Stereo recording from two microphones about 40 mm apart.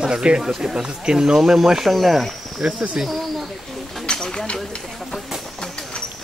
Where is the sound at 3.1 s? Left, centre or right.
Centre.